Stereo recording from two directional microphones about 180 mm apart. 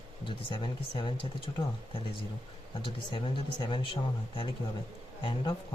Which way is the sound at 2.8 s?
30° left (ahead or behind).